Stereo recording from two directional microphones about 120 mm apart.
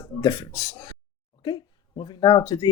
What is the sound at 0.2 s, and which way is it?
Speech, 35° left (ahead or behind).